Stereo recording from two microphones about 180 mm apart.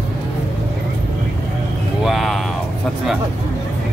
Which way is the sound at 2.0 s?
Centre (ahead or behind).